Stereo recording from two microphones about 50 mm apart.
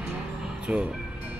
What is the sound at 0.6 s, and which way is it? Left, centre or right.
Speech, centre.